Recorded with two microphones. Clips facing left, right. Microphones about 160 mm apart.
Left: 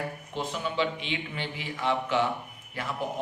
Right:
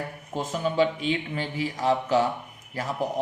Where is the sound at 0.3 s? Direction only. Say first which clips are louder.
Right 6 dB; 45° right (ahead or behind).